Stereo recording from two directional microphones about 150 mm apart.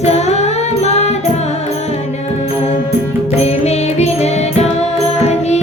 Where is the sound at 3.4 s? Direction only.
45° left (ahead or behind).